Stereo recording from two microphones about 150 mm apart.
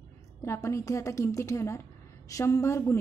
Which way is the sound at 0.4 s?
20° left (ahead or behind).